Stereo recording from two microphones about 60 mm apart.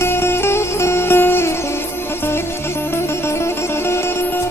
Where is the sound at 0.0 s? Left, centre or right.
Left.